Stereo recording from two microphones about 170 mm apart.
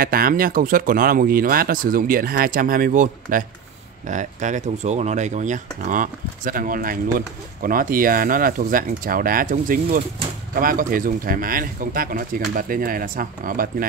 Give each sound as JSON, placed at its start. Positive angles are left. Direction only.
{"t": 0.0, "sound": "speech", "side_deg": -60}